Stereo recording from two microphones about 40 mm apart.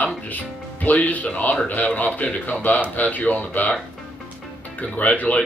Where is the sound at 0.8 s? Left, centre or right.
Left.